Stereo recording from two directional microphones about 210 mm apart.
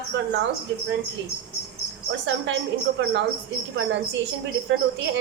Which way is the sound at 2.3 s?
60° right (ahead or behind).